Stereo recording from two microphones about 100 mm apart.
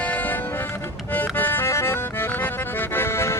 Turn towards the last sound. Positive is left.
turn(degrees=25)  # may be behind; listen again after turning